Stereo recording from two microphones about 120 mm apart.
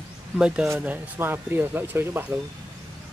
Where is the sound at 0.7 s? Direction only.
10° right (ahead or behind).